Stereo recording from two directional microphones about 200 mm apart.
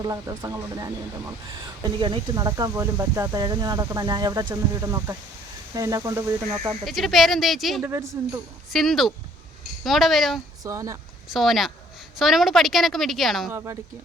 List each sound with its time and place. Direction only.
0.0 s speech: 15° right (ahead or behind)
6.8 s a woman's voice: centre (ahead or behind)
7.9 s speech: 15° right (ahead or behind)
8.7 s a woman's voice: centre (ahead or behind)
10.6 s speech: 15° right (ahead or behind)
11.3 s a woman's voice: centre (ahead or behind)
13.5 s speech: 15° right (ahead or behind)